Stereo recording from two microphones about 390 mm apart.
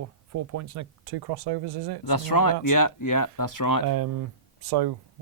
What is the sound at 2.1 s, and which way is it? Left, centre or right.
Speech, left.